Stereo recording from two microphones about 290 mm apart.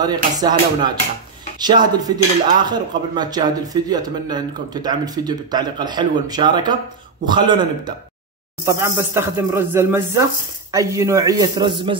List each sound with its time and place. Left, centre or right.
0.0 s cutlery: centre